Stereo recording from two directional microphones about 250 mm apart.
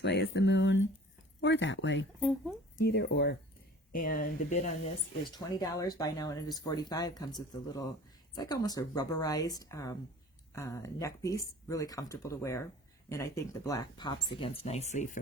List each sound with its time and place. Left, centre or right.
0.0 s speech: left
5.3 s speech: centre